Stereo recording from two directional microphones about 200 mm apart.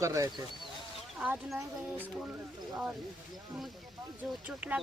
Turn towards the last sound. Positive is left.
turn(degrees=-5)  # may be behind; listen again after turning